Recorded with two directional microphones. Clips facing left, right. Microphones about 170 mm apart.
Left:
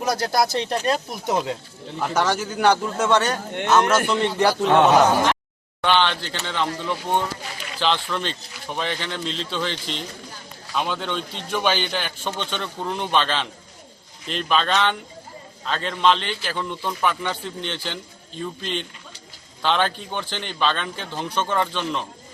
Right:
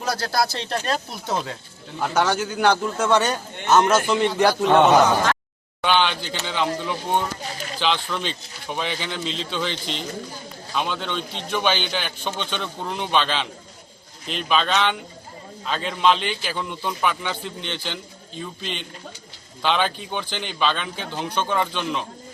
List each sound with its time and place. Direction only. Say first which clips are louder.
0.0 s speech: left 2 dB; 20° left (ahead or behind)
2.0 s a man's voice: right 1 dB; 5° right (ahead or behind)
3.1 s a man's voice: even; 15° right (ahead or behind)
3.7 s a man's voice: right 1 dB; 5° right (ahead or behind)